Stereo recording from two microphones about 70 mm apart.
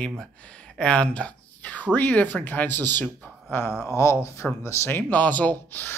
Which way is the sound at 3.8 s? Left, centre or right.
Left.